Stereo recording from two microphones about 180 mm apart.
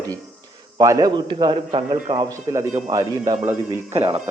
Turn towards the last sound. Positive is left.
turn(degrees=-20)  # may be behind; listen again after turning